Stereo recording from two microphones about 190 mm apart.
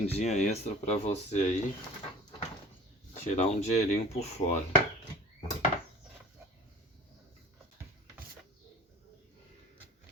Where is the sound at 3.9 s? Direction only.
35° left (ahead or behind).